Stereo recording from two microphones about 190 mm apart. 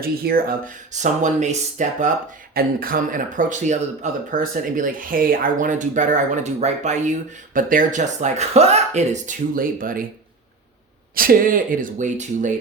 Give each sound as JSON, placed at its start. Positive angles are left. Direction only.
{"t": 0.0, "sound": "speech", "side_deg": -50}
{"t": 11.1, "sound": "speech", "side_deg": -50}